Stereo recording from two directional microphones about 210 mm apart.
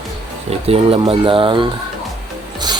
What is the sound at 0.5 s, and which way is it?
Speech, 25° right (ahead or behind).